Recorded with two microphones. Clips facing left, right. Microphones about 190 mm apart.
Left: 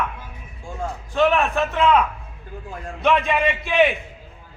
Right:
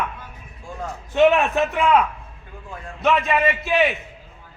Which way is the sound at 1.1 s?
20° right (ahead or behind).